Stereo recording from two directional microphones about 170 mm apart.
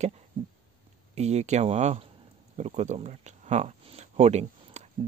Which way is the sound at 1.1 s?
40° right (ahead or behind).